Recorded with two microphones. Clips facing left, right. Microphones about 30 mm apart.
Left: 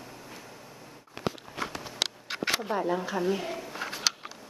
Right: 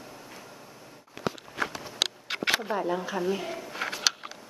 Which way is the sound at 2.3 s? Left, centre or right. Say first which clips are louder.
Right 3 dB; right.